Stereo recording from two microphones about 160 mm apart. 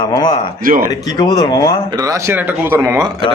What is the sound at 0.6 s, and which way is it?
Speech, 60° right (ahead or behind).